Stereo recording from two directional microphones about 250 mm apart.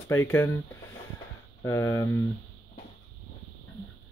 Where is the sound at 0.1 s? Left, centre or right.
Centre.